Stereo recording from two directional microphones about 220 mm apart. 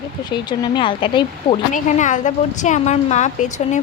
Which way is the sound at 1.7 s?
35° left (ahead or behind).